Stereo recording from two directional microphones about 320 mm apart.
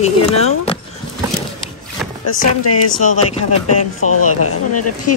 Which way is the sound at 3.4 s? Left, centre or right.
Left.